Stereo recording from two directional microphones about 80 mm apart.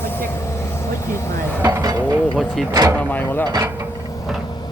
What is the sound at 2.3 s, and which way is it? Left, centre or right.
Speech, centre.